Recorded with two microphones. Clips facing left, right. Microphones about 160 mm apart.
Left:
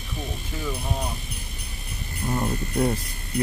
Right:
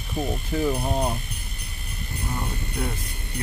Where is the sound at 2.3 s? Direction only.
30° left (ahead or behind).